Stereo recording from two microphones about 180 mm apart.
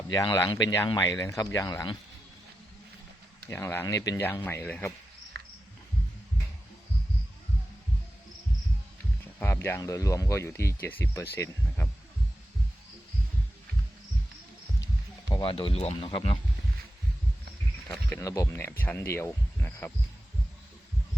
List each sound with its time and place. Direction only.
0.1 s speech: 20° left (ahead or behind)
3.5 s speech: 10° left (ahead or behind)
5.3 s cricket: 60° right (ahead or behind)
9.4 s speech: 15° left (ahead or behind)
15.3 s speech: 30° left (ahead or behind)
18.2 s speech: 20° left (ahead or behind)